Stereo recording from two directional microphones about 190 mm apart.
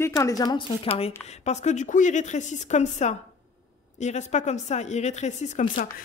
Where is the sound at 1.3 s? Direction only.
35° left (ahead or behind).